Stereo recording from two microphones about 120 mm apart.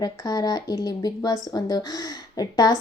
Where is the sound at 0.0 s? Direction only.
35° left (ahead or behind).